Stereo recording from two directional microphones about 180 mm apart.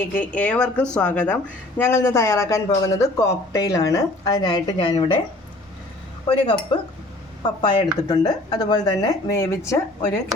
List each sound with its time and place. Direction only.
0.1 s a woman's voice: 10° left (ahead or behind); by 5.2 s 25° left (ahead or behind)
6.2 s speech: 30° left (ahead or behind); by 10.2 s 15° left (ahead or behind)